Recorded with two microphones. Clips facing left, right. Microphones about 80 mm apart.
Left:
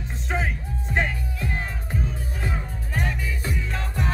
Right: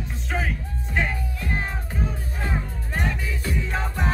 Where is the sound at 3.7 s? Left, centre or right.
Right.